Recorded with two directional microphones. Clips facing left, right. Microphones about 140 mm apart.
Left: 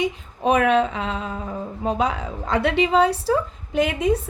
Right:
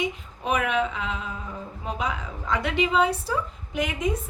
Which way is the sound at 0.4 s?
35° left (ahead or behind).